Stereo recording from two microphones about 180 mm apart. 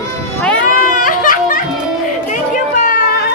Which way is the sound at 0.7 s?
50° left (ahead or behind).